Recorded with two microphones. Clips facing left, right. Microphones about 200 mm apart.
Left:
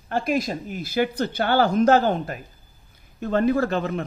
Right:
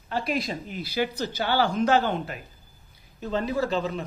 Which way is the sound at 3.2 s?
55° left (ahead or behind).